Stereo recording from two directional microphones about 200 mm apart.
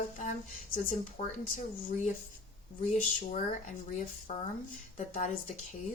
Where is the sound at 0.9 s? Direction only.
40° left (ahead or behind).